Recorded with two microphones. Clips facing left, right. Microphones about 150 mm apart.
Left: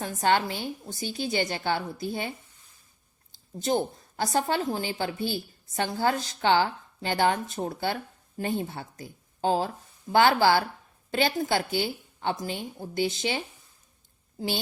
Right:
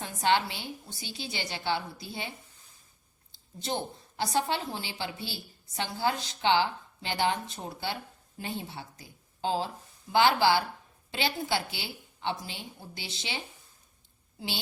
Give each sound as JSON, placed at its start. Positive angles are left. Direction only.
{"t": 0.0, "sound": "a woman's voice", "side_deg": 45}
{"t": 3.3, "sound": "a woman's voice", "side_deg": 45}